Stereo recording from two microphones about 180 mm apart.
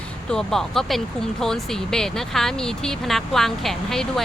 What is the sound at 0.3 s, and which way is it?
Speech, 5° left (ahead or behind).